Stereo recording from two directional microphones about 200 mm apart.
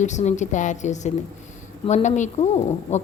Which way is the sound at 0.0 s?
35° left (ahead or behind).